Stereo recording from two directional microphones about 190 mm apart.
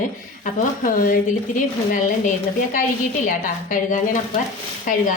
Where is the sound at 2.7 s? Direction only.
40° left (ahead or behind).